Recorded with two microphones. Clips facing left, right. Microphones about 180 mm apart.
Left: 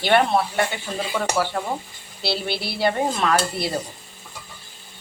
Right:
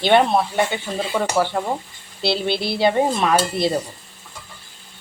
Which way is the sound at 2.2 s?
20° right (ahead or behind).